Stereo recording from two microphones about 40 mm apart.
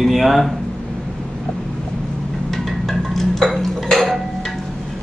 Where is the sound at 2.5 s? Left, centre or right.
Centre.